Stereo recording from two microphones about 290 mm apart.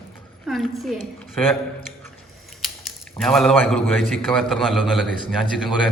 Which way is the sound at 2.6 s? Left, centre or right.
Centre.